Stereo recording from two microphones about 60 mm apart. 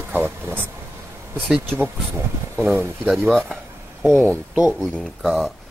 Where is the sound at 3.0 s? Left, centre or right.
Centre.